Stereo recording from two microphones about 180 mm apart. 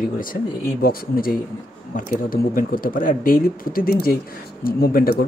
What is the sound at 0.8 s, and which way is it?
Speech, 55° left (ahead or behind).